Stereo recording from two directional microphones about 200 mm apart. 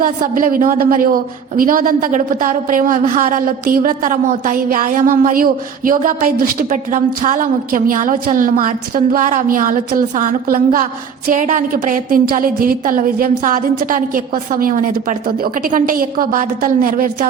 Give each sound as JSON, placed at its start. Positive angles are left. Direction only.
{"t": 0.0, "sound": "a woman's voice", "side_deg": -45}